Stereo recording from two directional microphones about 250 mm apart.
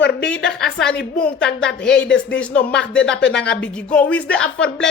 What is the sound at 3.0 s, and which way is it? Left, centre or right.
Speech, left.